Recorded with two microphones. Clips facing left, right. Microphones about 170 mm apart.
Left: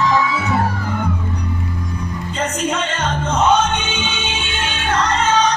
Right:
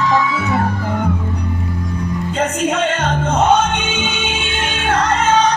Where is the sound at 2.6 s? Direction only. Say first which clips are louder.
Right 3 dB; 55° right (ahead or behind).